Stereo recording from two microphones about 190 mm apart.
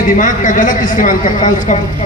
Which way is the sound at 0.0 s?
45° left (ahead or behind).